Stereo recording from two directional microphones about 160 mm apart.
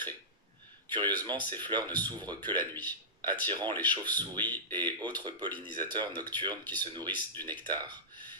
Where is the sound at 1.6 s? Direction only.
25° right (ahead or behind).